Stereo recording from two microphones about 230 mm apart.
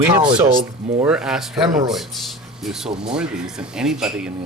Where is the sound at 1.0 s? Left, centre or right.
Centre.